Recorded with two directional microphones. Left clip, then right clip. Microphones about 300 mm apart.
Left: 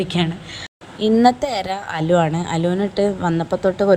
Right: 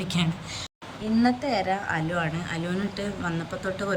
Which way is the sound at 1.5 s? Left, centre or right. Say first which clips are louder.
Left 3 dB; left.